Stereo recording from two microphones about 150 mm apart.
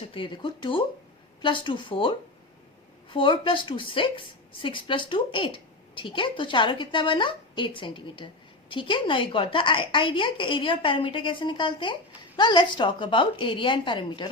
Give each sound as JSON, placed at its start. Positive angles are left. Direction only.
{"t": 0.1, "sound": "a woman's voice", "side_deg": 35}